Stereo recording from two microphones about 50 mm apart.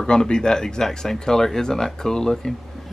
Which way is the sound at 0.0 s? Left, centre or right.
Centre.